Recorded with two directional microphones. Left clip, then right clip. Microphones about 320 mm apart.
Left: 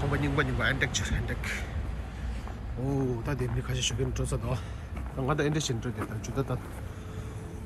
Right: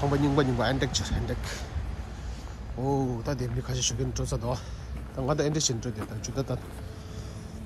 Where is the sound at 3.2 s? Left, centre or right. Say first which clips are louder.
Right 1 dB; centre.